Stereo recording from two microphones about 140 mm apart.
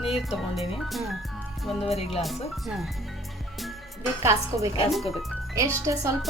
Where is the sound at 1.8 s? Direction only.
45° left (ahead or behind).